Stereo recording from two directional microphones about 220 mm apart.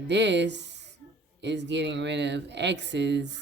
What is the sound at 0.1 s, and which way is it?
Speech, 50° right (ahead or behind).